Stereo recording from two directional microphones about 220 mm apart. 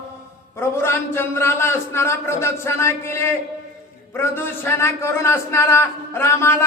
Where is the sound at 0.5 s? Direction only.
10° left (ahead or behind).